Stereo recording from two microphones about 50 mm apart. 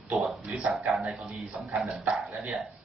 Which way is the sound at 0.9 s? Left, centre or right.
Centre.